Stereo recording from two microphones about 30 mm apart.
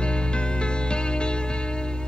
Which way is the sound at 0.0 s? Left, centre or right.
Left.